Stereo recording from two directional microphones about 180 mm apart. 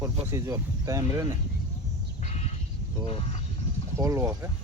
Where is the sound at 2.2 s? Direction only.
40° left (ahead or behind).